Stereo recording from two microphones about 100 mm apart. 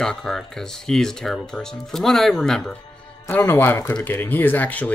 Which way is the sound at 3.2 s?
20° left (ahead or behind).